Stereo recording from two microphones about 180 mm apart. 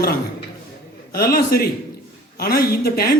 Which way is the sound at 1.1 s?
55° left (ahead or behind).